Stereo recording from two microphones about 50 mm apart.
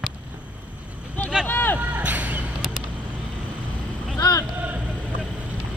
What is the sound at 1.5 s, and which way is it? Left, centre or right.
Speech, left.